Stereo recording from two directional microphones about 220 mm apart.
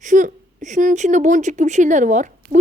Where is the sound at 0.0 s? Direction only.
35° right (ahead or behind).